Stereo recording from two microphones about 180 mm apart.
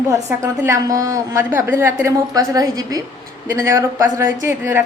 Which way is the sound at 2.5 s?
20° right (ahead or behind).